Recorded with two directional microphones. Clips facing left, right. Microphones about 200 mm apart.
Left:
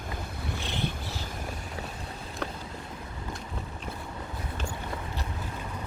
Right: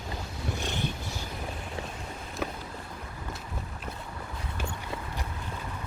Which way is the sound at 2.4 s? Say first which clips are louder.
Right 1 dB; 5° right (ahead or behind).